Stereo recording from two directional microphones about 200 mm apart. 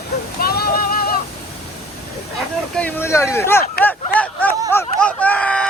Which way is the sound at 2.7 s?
10° left (ahead or behind).